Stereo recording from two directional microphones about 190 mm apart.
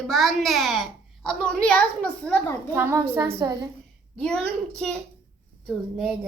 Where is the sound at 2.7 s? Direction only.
10° right (ahead or behind).